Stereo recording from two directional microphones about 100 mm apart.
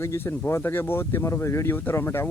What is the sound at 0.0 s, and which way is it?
Speech, 25° left (ahead or behind).